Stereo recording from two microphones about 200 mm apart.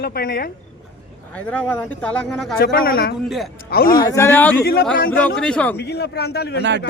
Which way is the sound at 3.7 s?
50° left (ahead or behind).